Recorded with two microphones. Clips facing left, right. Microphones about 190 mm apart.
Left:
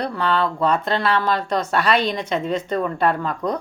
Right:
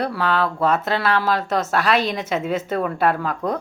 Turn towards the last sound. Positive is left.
turn(degrees=-5)  # may be behind; listen again after turning